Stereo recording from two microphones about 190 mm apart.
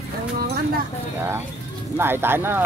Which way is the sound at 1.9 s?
10° right (ahead or behind).